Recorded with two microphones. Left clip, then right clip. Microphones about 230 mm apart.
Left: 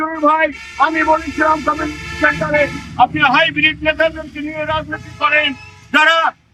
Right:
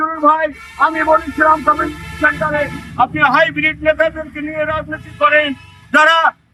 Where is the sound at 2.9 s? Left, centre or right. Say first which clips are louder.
Even; centre.